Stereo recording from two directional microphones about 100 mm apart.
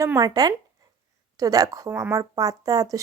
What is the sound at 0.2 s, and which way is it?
Speech, 40° right (ahead or behind).